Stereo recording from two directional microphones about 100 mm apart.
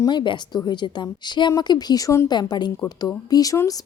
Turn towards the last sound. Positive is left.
turn(degrees=35)  # may be behind; listen again after turning